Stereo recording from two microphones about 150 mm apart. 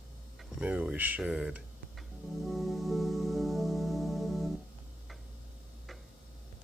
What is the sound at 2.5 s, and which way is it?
Music, centre (ahead or behind).